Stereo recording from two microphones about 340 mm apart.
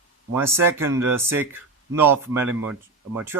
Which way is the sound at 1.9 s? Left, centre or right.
Centre.